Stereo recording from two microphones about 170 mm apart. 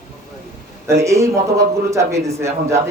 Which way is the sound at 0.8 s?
15° right (ahead or behind).